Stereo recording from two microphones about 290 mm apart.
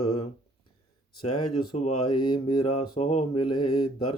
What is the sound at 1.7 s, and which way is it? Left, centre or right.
Speech, centre.